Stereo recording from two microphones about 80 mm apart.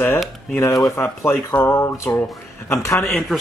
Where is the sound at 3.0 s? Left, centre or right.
Centre.